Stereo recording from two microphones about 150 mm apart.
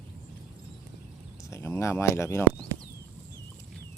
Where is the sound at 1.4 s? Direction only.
15° left (ahead or behind).